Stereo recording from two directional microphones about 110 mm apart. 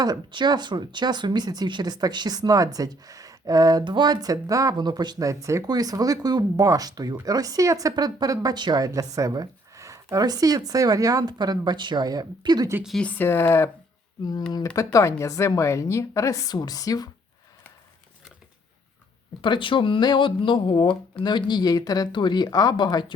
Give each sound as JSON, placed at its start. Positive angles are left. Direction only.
{"t": 0.0, "sound": "speech", "side_deg": -40}
{"t": 13.0, "sound": "speech", "side_deg": 15}
{"t": 14.8, "sound": "a woman's voice", "side_deg": 30}
{"t": 19.4, "sound": "speech", "side_deg": 50}